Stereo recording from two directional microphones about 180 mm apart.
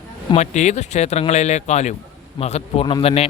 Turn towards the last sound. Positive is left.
turn(degrees=35)  # may be behind; listen again after turning